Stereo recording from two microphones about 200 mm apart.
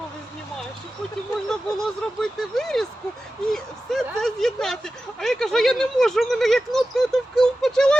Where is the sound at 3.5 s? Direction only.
Centre (ahead or behind).